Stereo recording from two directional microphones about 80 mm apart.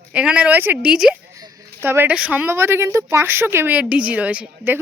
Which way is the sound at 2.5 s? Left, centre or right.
Right.